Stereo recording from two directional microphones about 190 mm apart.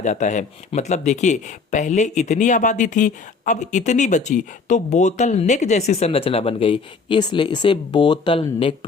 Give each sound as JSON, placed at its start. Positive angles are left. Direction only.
{"t": 0.0, "sound": "speech", "side_deg": 40}